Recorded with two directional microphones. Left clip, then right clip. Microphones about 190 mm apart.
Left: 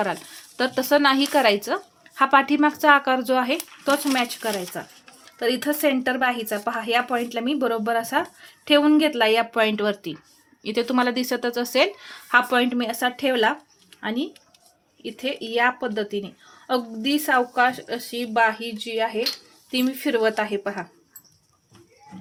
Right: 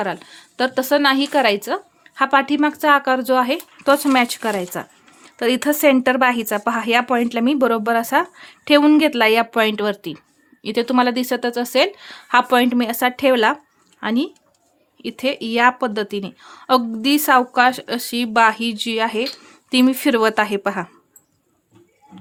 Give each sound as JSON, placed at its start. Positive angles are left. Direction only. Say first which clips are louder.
{"t": 0.0, "sound": "a woman's voice", "louder": "right 1 dB", "side_deg": -20}